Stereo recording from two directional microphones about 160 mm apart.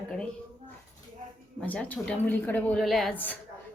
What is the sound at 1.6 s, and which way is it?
A woman's voice, 10° left (ahead or behind).